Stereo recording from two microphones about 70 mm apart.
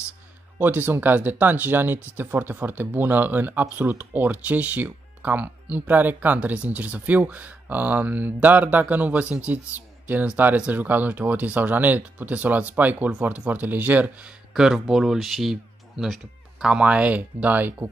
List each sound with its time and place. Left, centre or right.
0.6 s speech: right
14.5 s speech: centre; by 17.8 s right